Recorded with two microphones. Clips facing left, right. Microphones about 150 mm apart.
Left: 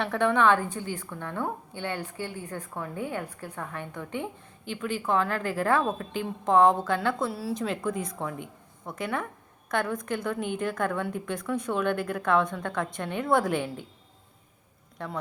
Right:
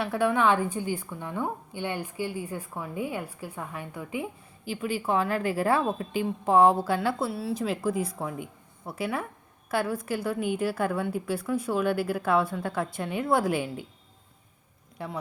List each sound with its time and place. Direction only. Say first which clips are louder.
0.0 s a woman's voice: left 1 dB; 5° right (ahead or behind)
14.9 s speech: even; 5° right (ahead or behind)